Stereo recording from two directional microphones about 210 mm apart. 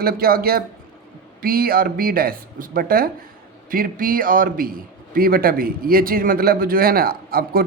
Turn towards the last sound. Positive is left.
turn(degrees=-45)  # may be behind; listen again after turning